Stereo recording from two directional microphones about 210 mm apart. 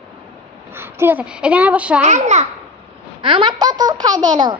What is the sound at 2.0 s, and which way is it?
Speech, 35° right (ahead or behind).